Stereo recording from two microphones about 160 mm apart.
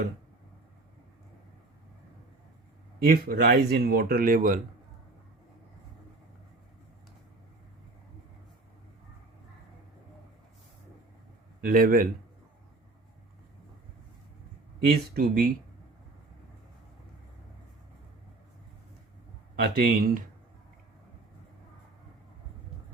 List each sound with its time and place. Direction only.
3.0 s speech: 70° right (ahead or behind)
11.6 s speech: 65° right (ahead or behind)
15.1 s speech: 65° right (ahead or behind)
19.5 s speech: 75° right (ahead or behind)